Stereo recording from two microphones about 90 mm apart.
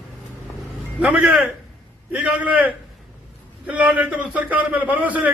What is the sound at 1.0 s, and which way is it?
A man's voice, 15° right (ahead or behind).